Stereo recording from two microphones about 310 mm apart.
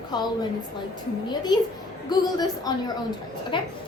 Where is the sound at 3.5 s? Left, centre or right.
Centre.